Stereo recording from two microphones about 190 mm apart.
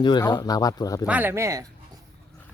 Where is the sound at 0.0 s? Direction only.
25° left (ahead or behind).